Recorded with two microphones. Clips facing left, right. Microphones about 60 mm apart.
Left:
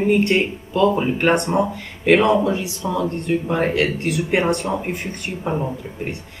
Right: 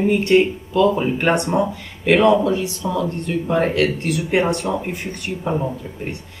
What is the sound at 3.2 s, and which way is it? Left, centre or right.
Speech, centre.